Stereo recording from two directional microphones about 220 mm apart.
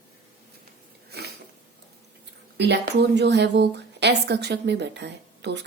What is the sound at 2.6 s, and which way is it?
A woman's voice, 50° right (ahead or behind).